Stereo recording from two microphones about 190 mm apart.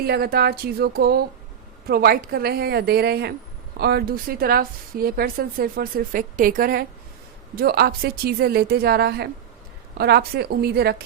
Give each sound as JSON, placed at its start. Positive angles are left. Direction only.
{"t": 0.0, "sound": "a woman's voice", "side_deg": -55}